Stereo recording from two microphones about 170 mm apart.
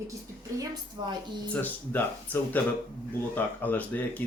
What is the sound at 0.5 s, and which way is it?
Speech, 25° right (ahead or behind).